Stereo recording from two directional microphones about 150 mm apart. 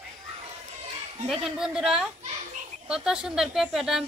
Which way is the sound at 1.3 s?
Centre (ahead or behind).